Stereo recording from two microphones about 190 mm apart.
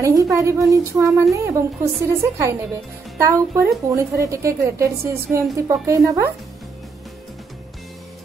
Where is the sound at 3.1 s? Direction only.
15° right (ahead or behind).